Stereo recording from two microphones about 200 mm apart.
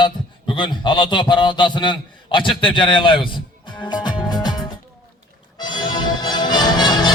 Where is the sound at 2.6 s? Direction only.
25° left (ahead or behind).